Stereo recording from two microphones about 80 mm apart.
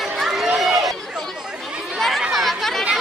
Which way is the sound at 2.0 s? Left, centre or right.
Centre.